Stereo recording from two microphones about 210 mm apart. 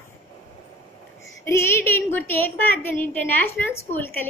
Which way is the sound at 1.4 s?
10° left (ahead or behind).